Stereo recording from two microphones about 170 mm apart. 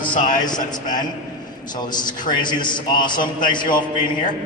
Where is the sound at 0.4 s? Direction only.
25° left (ahead or behind).